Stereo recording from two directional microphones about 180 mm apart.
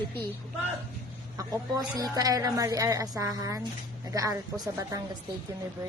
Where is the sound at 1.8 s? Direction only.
20° right (ahead or behind).